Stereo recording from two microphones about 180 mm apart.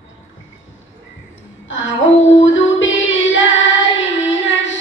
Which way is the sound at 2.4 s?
90° left.